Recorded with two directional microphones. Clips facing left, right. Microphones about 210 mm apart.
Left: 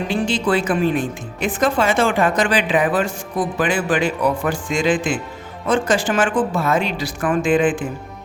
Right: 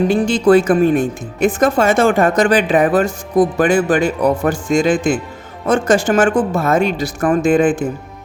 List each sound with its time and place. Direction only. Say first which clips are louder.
0.1 s speech: right 5 dB; 45° right (ahead or behind)